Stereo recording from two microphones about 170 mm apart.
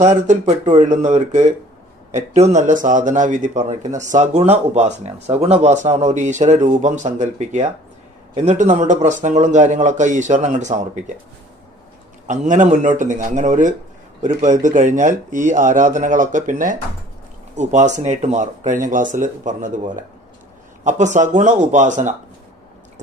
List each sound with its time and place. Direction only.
0.0 s a man's voice: 45° right (ahead or behind)
12.3 s a man's voice: 45° right (ahead or behind)
20.8 s a man's voice: 45° right (ahead or behind)